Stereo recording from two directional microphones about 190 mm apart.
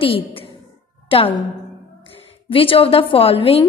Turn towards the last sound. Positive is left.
turn(degrees=30)  # may be behind; listen again after turning